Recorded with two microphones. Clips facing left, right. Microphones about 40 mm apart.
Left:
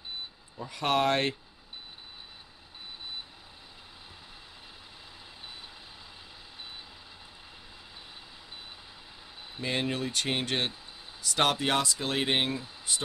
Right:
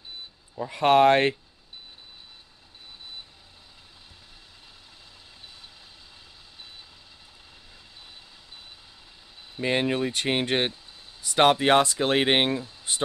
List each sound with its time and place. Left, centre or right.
0.6 s speech: right
9.6 s speech: right